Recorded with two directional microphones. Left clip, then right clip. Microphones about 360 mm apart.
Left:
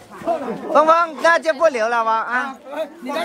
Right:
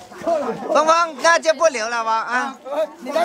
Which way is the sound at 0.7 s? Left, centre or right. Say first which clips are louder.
Left 2 dB; centre.